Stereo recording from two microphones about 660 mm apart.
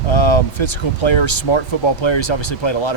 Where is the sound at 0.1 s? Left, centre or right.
Left.